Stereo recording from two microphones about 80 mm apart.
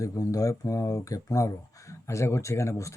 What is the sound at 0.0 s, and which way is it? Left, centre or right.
Speech, left.